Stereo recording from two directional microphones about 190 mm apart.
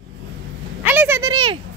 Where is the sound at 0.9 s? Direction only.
10° right (ahead or behind).